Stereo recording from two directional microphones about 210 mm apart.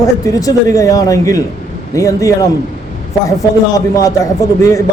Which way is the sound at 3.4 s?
15° left (ahead or behind).